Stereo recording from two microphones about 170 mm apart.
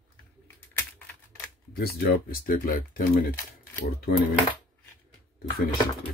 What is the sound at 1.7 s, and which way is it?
Speech, 65° left (ahead or behind).